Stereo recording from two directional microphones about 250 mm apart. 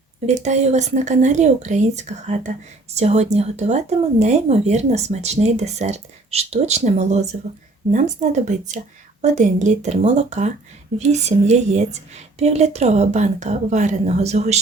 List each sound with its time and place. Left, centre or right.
0.3 s speech: right